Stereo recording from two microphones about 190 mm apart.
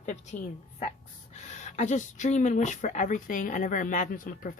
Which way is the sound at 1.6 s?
40° left (ahead or behind).